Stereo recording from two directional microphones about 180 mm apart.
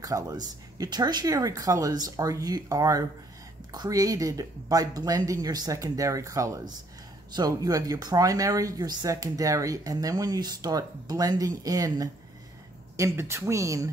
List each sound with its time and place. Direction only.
0.0 s speech: 20° right (ahead or behind)